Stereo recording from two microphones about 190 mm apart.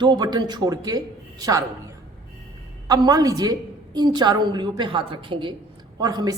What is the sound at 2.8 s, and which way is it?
A woman's voice, 20° right (ahead or behind).